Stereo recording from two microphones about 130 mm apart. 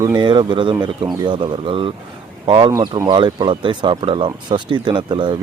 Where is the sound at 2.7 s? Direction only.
25° right (ahead or behind).